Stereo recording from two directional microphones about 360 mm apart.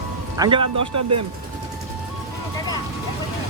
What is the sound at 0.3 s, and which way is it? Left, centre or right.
Speech, centre.